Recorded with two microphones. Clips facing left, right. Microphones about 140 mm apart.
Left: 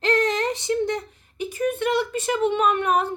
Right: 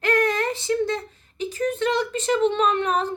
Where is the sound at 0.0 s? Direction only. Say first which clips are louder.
Even; 20° left (ahead or behind).